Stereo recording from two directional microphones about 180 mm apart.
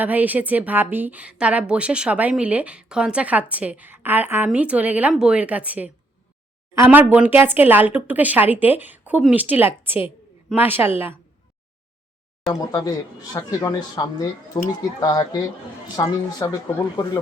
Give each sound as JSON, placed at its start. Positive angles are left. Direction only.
{"t": 0.0, "sound": "a woman's voice", "side_deg": -10}
{"t": 12.4, "sound": "a sound", "side_deg": 0}
{"t": 12.7, "sound": "speech", "side_deg": 20}